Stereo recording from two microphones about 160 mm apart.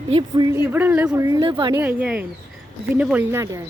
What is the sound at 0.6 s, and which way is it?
Speech, 10° right (ahead or behind).